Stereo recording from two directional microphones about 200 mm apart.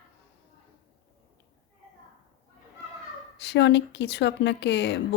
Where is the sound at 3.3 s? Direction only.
60° left (ahead or behind).